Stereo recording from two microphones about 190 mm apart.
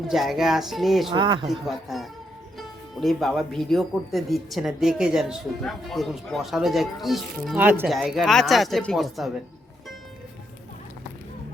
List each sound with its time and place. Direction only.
0.1 s speech: centre (ahead or behind)
1.1 s speech: 25° right (ahead or behind)
1.5 s speech: centre (ahead or behind)